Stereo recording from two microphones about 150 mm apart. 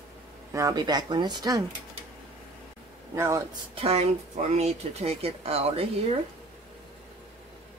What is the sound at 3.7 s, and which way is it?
Speech, 45° right (ahead or behind).